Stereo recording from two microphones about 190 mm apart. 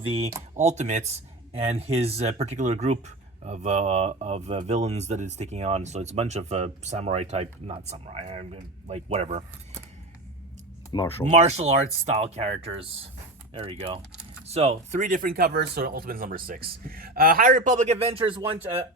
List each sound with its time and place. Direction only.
0.0 s speech: 30° right (ahead or behind)
10.9 s speech: 15° left (ahead or behind)
11.3 s speech: 35° right (ahead or behind)